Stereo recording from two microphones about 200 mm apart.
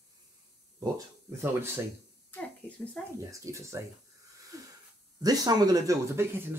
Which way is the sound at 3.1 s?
15° right (ahead or behind).